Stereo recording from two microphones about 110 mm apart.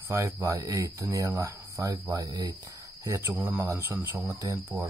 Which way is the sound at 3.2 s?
15° right (ahead or behind).